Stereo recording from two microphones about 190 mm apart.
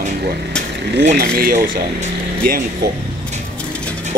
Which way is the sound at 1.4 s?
50° right (ahead or behind).